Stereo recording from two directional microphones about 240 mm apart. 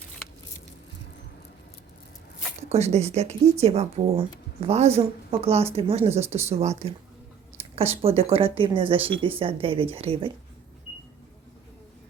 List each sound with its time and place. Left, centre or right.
2.6 s speech: right